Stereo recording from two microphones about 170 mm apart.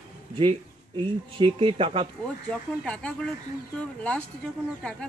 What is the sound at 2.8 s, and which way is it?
Speech, 5° left (ahead or behind).